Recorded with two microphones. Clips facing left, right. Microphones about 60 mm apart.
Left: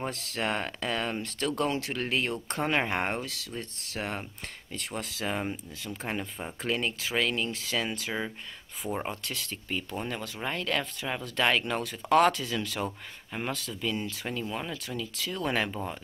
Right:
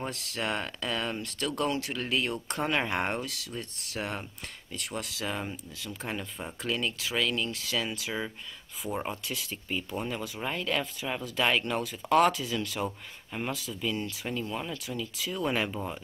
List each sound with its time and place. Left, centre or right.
0.0 s speech: centre
3.3 s speech: centre
5.2 s speech: centre
8.9 s speech: centre